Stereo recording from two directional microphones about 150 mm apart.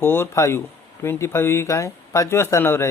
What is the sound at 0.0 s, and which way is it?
Speech, 15° left (ahead or behind).